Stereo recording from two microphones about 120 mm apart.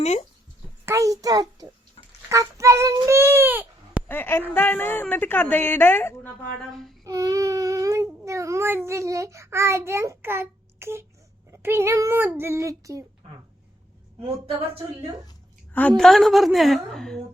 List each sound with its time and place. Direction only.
0.0 s speech: 65° left (ahead or behind)
0.9 s speech: 25° right (ahead or behind)
4.1 s a woman's voice: 20° left (ahead or behind)
6.6 s a woman's voice: centre (ahead or behind)
7.0 s speech: 30° right (ahead or behind)
14.2 s a woman's voice: 50° right (ahead or behind)
15.7 s a woman's voice: 10° left (ahead or behind)